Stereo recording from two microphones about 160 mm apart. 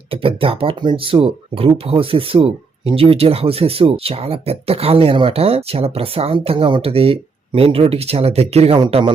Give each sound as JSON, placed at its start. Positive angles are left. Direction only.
{"t": 0.1, "sound": "speech", "side_deg": -35}